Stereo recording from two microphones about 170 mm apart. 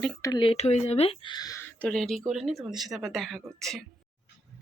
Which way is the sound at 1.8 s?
5° left (ahead or behind).